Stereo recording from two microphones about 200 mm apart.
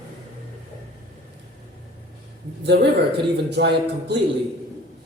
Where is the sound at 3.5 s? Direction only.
55° right (ahead or behind).